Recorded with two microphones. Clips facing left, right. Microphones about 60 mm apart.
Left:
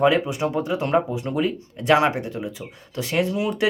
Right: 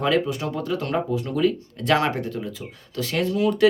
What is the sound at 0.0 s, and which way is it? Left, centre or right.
Speech, centre.